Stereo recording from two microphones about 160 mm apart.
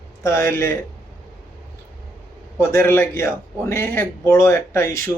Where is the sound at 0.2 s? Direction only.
15° left (ahead or behind).